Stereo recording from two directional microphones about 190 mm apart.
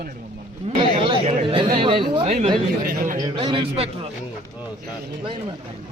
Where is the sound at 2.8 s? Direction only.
45° right (ahead or behind).